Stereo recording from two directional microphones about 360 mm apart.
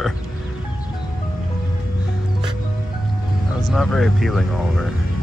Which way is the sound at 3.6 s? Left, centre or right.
Centre.